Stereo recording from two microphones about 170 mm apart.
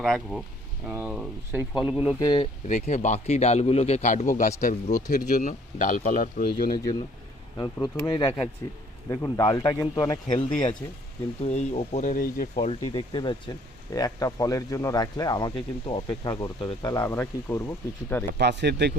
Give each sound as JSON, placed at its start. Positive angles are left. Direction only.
{"t": 0.0, "sound": "speech", "side_deg": 0}
{"t": 2.1, "sound": "speech", "side_deg": 25}
{"t": 2.6, "sound": "a man's voice", "side_deg": 45}
{"t": 6.7, "sound": "speech", "side_deg": 25}
{"t": 11.4, "sound": "a man's voice", "side_deg": 40}
{"t": 12.1, "sound": "speech", "side_deg": 55}
{"t": 12.6, "sound": "speech", "side_deg": 30}
{"t": 18.3, "sound": "speech", "side_deg": -75}